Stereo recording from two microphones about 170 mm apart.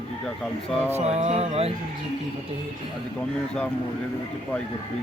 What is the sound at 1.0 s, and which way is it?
Speech, 40° right (ahead or behind).